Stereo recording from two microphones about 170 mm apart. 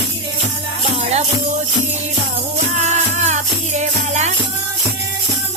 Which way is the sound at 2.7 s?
45° right (ahead or behind).